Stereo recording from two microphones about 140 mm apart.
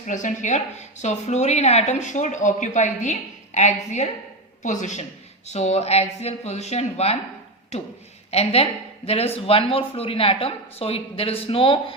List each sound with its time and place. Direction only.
0.0 s a woman's voice: 65° left (ahead or behind); by 7.2 s 50° left (ahead or behind)
8.3 s speech: 45° left (ahead or behind)